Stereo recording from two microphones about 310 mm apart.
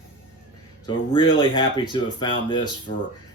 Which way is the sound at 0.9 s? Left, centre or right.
Centre.